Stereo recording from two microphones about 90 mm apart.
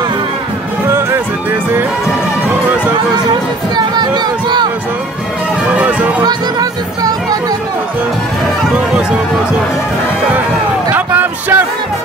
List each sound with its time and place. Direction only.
3.7 s speech: 50° right (ahead or behind)
5.8 s music: 15° right (ahead or behind)
6.2 s speech: 45° right (ahead or behind)
10.9 s a sound: 20° right (ahead or behind)